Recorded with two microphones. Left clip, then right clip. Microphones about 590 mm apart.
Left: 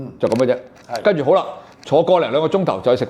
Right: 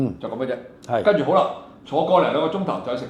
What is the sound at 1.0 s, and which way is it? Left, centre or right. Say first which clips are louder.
Speech: left 2 dB; left.